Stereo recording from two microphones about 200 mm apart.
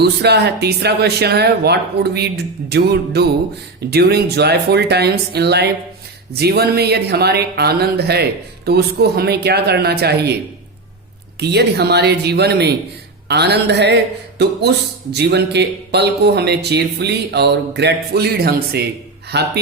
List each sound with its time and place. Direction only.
0.0 s speech: 55° right (ahead or behind)
11.3 s speech: 55° right (ahead or behind)